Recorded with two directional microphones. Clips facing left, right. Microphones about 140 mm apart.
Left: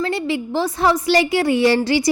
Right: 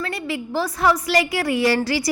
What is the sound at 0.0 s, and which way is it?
A woman's voice, 25° left (ahead or behind).